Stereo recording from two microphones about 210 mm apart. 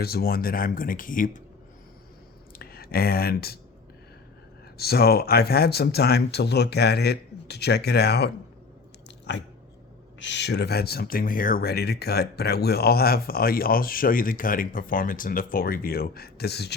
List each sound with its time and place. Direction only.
0.0 s speech: 45° left (ahead or behind)
2.6 s speech: 45° left (ahead or behind)
4.8 s speech: 50° left (ahead or behind)
9.0 s biting: 55° left (ahead or behind)
10.2 s speech: 55° left (ahead or behind)